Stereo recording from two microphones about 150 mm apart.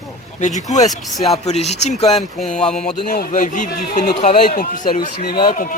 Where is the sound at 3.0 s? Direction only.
65° left (ahead or behind).